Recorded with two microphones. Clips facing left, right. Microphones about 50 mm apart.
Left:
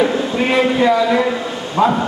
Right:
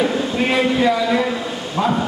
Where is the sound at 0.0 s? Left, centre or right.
Centre.